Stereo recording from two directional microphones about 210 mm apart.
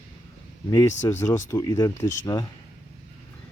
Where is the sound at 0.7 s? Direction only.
15° left (ahead or behind).